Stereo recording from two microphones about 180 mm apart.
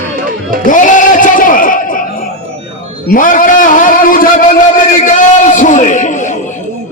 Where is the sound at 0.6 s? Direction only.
45° left (ahead or behind).